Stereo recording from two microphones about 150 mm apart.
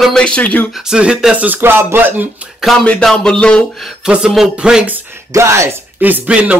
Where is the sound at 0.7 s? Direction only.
Centre (ahead or behind).